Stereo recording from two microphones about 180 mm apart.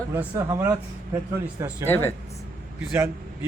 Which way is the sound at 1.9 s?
15° left (ahead or behind).